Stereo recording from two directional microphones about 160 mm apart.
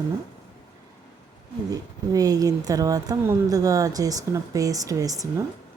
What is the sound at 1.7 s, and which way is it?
Speech, 25° right (ahead or behind).